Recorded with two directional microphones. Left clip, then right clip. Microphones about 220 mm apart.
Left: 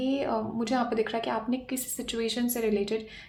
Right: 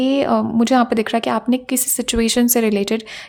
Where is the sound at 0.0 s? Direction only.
45° right (ahead or behind).